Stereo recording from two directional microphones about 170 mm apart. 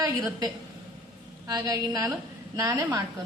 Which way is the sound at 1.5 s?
20° right (ahead or behind).